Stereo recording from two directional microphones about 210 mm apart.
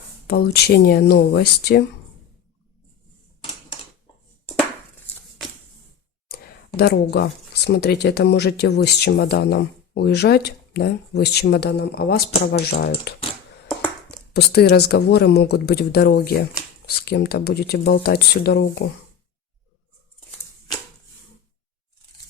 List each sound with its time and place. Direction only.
0.3 s speech: 50° left (ahead or behind)
6.7 s speech: 50° left (ahead or behind)
14.3 s speech: 50° left (ahead or behind)